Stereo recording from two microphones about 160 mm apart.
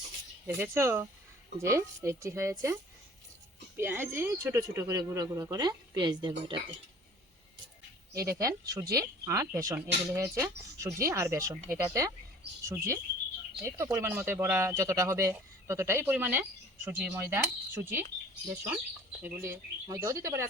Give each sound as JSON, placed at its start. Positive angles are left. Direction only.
{"t": 0.4, "sound": "speech", "side_deg": -15}
{"t": 3.8, "sound": "speech", "side_deg": -15}
{"t": 8.1, "sound": "speech", "side_deg": -20}
{"t": 19.2, "sound": "speech", "side_deg": -15}